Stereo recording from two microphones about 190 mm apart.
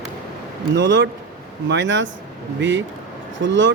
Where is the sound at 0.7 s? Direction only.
75° right (ahead or behind).